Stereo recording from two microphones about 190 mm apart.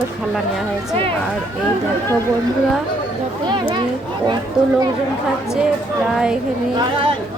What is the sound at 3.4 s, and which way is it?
Speech, 25° right (ahead or behind).